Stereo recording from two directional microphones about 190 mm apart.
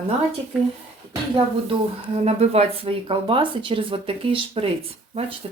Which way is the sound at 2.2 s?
35° right (ahead or behind).